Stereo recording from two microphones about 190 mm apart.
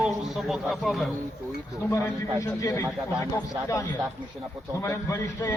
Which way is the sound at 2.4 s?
15° left (ahead or behind).